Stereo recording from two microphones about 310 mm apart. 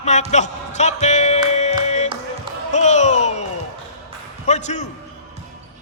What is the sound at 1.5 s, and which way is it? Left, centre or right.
Music, left.